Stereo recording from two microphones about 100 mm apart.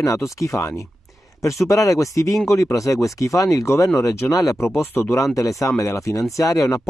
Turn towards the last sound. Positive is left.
turn(degrees=35)  # may be behind; listen again after turning